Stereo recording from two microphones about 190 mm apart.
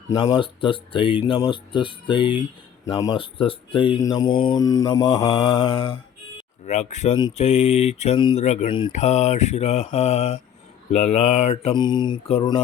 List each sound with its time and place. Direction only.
0.1 s speech: 20° left (ahead or behind)
6.7 s mantra: 35° left (ahead or behind)
7.2 s speech: 25° left (ahead or behind)
7.4 s mantra: 35° left (ahead or behind)